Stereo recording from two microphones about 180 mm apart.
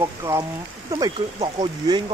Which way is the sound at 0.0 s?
15° right (ahead or behind).